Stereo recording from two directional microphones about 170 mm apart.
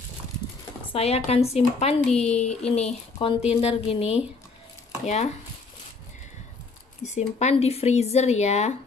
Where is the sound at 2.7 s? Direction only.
40° left (ahead or behind).